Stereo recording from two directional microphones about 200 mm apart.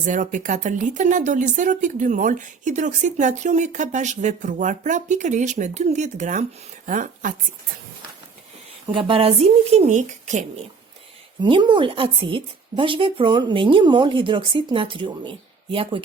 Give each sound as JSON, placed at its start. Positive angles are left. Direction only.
{"t": 0.0, "sound": "a woman's voice", "side_deg": -40}
{"t": 8.9, "sound": "speech", "side_deg": -25}
{"t": 11.4, "sound": "speech", "side_deg": -25}